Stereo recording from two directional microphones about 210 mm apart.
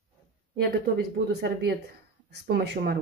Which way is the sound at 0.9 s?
50° right (ahead or behind).